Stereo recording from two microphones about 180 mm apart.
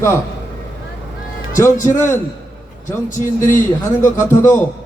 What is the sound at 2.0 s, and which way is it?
Speech, 15° left (ahead or behind).